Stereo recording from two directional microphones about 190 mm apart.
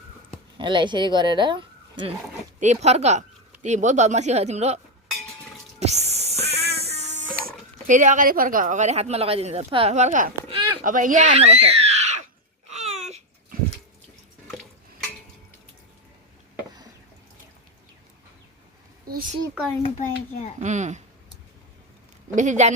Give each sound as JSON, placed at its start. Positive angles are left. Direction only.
{"t": 0.5, "sound": "speech", "side_deg": -25}
{"t": 2.6, "sound": "speech", "side_deg": -35}
{"t": 5.8, "sound": "music", "side_deg": -35}
{"t": 7.9, "sound": "speech", "side_deg": -40}
{"t": 10.5, "sound": "a sound", "side_deg": -25}
{"t": 10.8, "sound": "a sound", "side_deg": -45}
{"t": 12.7, "sound": "babbling", "side_deg": -35}
{"t": 19.8, "sound": "a child's voice", "side_deg": 40}
{"t": 20.6, "sound": "speech", "side_deg": -40}
{"t": 22.4, "sound": "speech", "side_deg": -40}